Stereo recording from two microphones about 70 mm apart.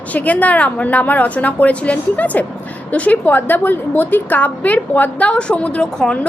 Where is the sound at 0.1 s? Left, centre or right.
Left.